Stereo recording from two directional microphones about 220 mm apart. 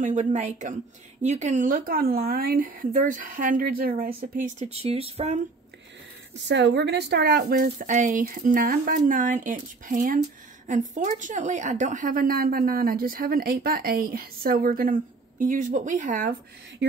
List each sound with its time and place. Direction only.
0.0 s speech: 35° right (ahead or behind)
6.4 s speech: 50° right (ahead or behind); by 16.3 s 35° right (ahead or behind)